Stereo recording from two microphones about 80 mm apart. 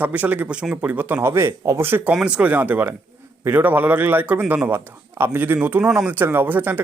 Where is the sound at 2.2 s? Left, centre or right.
Centre.